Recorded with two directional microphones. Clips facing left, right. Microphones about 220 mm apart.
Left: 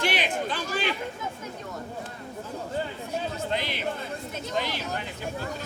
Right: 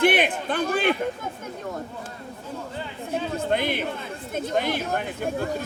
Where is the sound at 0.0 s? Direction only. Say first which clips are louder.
Right 7 dB; 55° right (ahead or behind).